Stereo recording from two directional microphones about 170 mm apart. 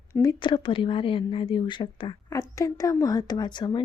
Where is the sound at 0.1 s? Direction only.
20° left (ahead or behind).